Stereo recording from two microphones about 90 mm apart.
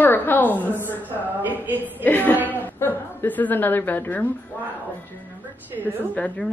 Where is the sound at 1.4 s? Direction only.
20° right (ahead or behind).